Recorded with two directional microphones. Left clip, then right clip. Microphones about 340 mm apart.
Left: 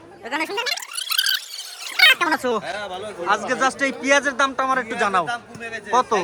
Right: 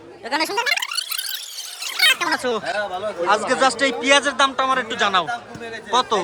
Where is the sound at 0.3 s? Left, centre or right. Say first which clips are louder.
Right 3 dB; centre.